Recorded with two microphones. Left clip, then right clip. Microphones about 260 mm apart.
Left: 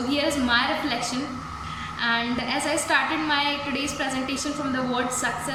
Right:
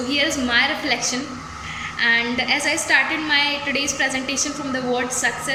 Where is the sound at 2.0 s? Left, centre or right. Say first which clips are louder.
Right 6 dB; centre.